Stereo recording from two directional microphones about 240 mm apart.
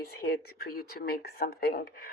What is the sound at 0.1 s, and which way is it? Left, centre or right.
Speech, left.